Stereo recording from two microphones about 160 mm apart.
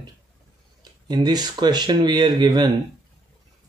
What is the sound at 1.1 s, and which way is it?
Speech, 25° right (ahead or behind).